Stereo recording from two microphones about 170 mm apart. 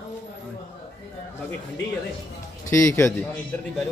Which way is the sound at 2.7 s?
15° left (ahead or behind).